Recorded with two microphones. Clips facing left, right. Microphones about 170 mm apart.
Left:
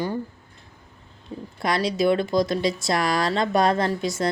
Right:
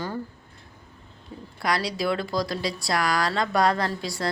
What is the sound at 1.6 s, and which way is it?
A woman's voice, 20° left (ahead or behind).